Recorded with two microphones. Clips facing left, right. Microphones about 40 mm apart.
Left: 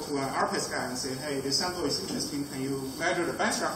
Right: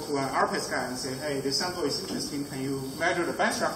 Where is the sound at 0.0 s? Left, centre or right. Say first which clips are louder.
Right 2 dB; centre.